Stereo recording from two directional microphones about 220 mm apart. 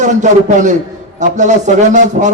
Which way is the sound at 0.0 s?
35° right (ahead or behind).